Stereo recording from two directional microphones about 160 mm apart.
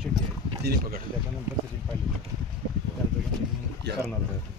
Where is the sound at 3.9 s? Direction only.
90° right.